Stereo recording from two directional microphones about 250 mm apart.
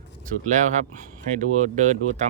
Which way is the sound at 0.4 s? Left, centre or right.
Right.